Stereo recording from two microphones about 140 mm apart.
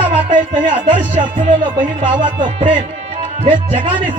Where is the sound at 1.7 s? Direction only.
35° right (ahead or behind).